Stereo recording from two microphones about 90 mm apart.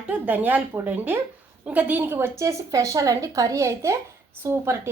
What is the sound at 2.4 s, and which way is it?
A woman's voice, 35° right (ahead or behind).